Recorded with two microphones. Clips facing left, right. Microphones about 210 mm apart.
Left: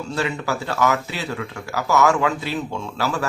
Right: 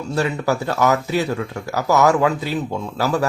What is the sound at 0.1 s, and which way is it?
Speech, 40° right (ahead or behind).